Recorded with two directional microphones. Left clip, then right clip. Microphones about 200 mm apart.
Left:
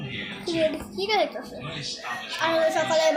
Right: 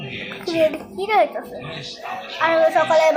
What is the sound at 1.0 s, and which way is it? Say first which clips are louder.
Speech: right 7 dB; 20° left (ahead or behind).